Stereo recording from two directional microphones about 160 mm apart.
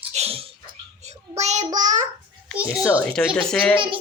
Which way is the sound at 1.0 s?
45° right (ahead or behind).